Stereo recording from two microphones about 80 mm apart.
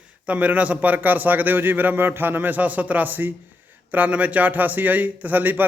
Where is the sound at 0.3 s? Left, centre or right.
Centre.